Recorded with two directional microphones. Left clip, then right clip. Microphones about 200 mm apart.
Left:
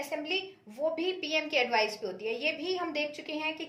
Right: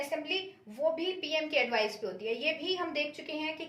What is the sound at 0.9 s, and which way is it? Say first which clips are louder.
A woman's voice: left 2 dB; 40° left (ahead or behind).